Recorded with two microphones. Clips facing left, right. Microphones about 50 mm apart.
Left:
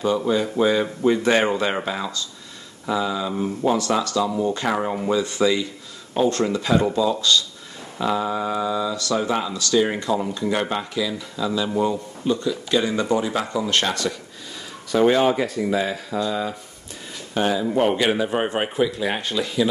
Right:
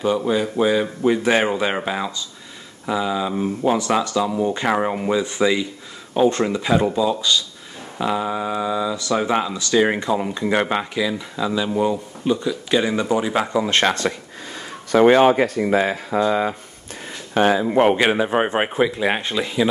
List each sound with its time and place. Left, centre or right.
0.0 s speech: centre; by 14.1 s right
15.0 s speech: right
15.7 s speech: right
17.9 s speech: right